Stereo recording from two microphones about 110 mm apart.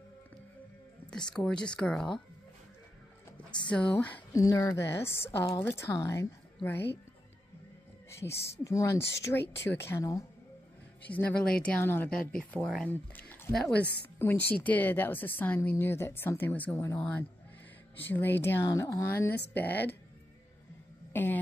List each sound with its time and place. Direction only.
1.3 s a woman's voice: 5° left (ahead or behind)
3.6 s a woman's voice: 10° left (ahead or behind)
4.3 s a woman's voice: 30° left (ahead or behind)
8.1 s speech: 25° left (ahead or behind)
11.1 s a woman's voice: 15° left (ahead or behind)
13.5 s speech: 5° left (ahead or behind)
14.1 s a woman's voice: 15° left (ahead or behind)
16.7 s speech: 25° left (ahead or behind)
21.1 s a sound: 20° left (ahead or behind)